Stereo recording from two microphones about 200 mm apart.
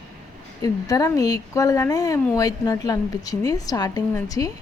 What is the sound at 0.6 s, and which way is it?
A woman's voice, 15° left (ahead or behind).